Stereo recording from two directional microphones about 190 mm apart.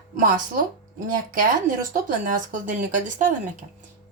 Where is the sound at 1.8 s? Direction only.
45° right (ahead or behind).